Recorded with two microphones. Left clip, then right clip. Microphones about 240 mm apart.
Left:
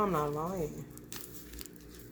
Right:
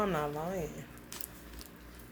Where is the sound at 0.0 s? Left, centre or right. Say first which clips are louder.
Left 2 dB; centre.